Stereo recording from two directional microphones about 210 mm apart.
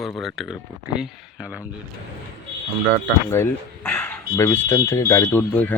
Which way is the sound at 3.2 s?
10° left (ahead or behind).